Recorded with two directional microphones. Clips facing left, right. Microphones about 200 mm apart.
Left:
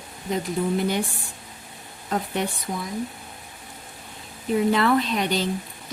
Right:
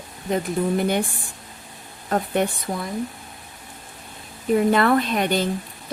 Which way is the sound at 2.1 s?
55° right (ahead or behind).